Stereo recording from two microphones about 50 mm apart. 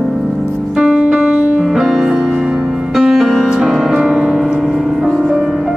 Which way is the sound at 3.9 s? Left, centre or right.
Centre.